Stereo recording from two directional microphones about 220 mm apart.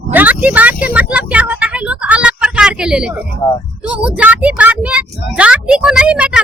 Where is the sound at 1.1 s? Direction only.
5° right (ahead or behind).